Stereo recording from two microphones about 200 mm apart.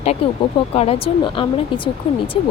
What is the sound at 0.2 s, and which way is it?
Speech, 30° left (ahead or behind).